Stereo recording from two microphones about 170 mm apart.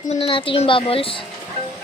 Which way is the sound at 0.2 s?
30° left (ahead or behind).